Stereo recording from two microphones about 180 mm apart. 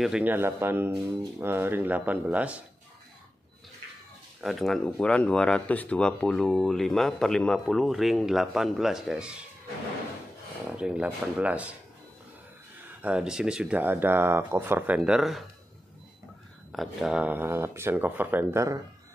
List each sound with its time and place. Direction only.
0.0 s speech: 5° right (ahead or behind)
4.4 s speech: centre (ahead or behind)
10.8 s speech: 5° right (ahead or behind)
13.0 s speech: 5° right (ahead or behind)
16.7 s speech: centre (ahead or behind)